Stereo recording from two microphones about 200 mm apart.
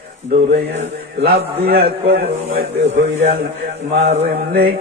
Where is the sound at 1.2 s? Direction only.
50° right (ahead or behind).